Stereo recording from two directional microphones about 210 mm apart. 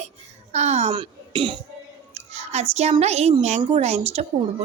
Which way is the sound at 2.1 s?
30° right (ahead or behind).